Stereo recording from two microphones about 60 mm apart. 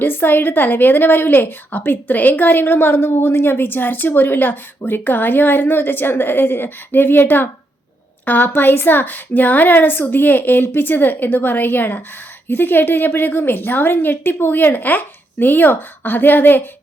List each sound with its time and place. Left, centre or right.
0.0 s a woman's voice: left